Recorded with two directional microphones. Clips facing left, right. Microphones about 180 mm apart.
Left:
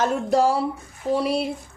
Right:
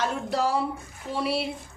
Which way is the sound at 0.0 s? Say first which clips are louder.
Left 7 dB; 45° left (ahead or behind).